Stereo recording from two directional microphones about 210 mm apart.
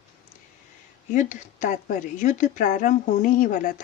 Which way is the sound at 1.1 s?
35° left (ahead or behind).